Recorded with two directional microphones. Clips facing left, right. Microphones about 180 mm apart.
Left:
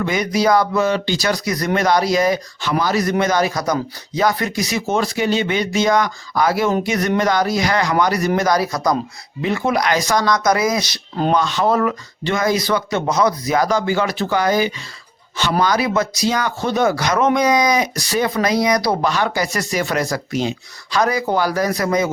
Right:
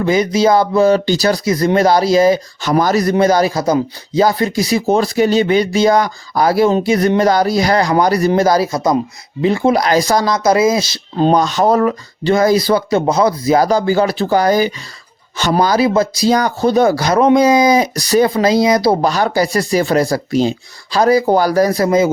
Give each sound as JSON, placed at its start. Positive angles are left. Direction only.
{"t": 0.0, "sound": "speech", "side_deg": -30}
{"t": 2.6, "sound": "a man's voice", "side_deg": -45}
{"t": 18.3, "sound": "a man's voice", "side_deg": -25}